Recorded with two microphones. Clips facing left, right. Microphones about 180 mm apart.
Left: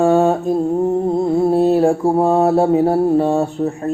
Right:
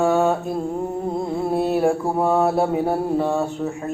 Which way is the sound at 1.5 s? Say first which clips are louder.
Left 3 dB; 35° left (ahead or behind).